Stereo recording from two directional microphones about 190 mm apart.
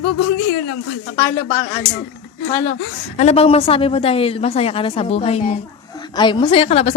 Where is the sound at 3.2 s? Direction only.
35° left (ahead or behind).